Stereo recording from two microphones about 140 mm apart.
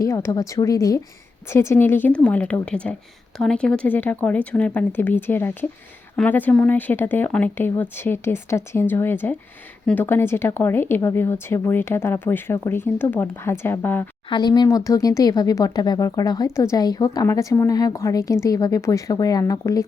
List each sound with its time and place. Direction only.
0.0 s a woman's voice: 20° left (ahead or behind)
14.3 s a woman's voice: 30° left (ahead or behind)